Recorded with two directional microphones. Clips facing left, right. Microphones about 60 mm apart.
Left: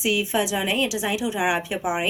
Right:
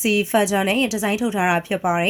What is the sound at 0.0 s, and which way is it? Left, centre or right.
A woman's voice, right.